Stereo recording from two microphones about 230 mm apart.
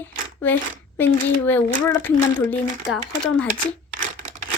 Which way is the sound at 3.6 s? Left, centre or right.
Right.